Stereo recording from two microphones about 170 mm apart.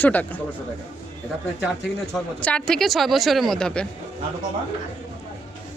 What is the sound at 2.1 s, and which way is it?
Speech, 5° left (ahead or behind).